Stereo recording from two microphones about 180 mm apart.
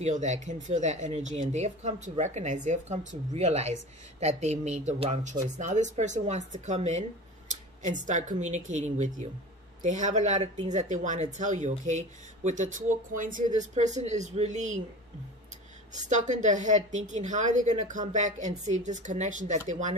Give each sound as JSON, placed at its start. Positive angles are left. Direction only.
{"t": 0.0, "sound": "speech", "side_deg": -40}
{"t": 5.3, "sound": "speech", "side_deg": -45}
{"t": 15.9, "sound": "a woman's voice", "side_deg": -40}